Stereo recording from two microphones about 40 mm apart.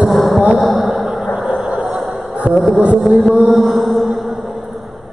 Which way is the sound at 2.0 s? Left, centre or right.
Centre.